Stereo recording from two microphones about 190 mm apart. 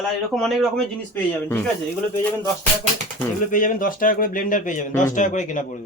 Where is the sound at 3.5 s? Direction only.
45° left (ahead or behind).